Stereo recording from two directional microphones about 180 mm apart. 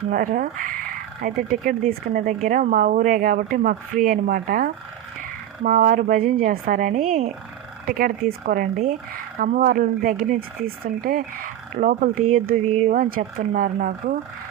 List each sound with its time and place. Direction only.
0.1 s speech: 50° right (ahead or behind)